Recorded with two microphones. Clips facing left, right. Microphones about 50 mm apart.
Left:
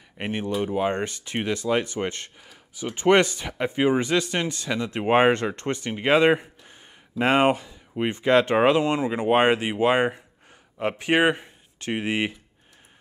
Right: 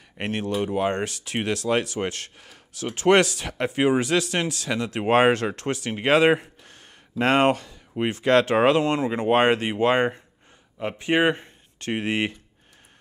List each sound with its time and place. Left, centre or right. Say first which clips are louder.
0.2 s speech: right 1 dB; centre
1.7 s speech: even; centre
2.0 s speech: even; centre
10.8 s speech: left 2 dB; left
11.1 s a sound: right 1 dB; centre
11.9 s speech: even; centre